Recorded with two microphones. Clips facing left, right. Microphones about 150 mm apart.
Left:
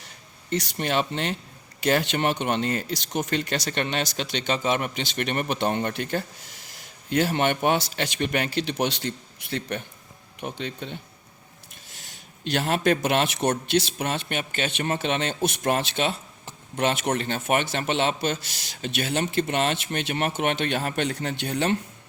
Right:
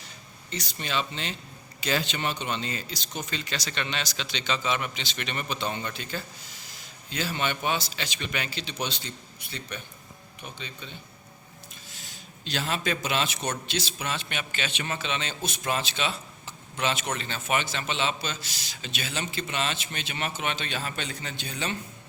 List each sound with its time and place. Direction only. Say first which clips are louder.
0.5 s speech: left 7 dB; 60° left (ahead or behind)
12.5 s speech: left 7 dB; 60° left (ahead or behind)